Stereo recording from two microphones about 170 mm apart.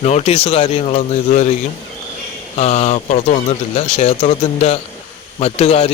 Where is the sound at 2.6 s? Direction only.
40° left (ahead or behind).